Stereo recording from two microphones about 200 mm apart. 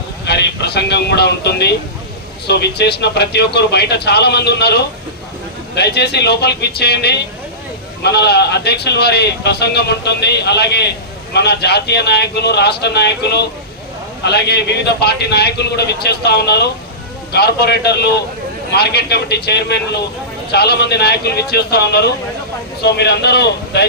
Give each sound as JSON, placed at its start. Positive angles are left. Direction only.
{"t": 0.3, "sound": "speech", "side_deg": 55}